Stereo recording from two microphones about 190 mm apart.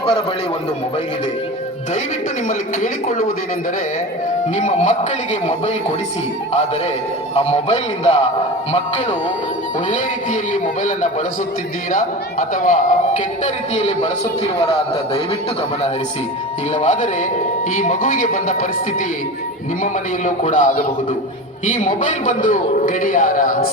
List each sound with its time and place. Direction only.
2.5 s a man's voice: 40° left (ahead or behind)
4.5 s a man's voice: 40° left (ahead or behind)
7.3 s a man's voice: 35° left (ahead or behind)
10.5 s a man's voice: 40° left (ahead or behind)
16.7 s a man's voice: 40° left (ahead or behind)
19.8 s a man's voice: 40° left (ahead or behind)